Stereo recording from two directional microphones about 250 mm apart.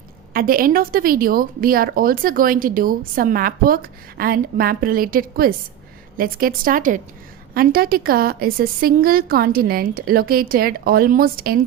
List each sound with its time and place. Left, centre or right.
0.3 s a woman's voice: right